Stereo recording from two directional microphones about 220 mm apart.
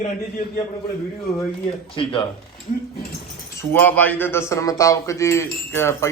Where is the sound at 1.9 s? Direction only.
25° left (ahead or behind).